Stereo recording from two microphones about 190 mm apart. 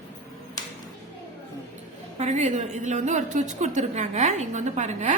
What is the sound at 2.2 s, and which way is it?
A woman's voice, 35° right (ahead or behind).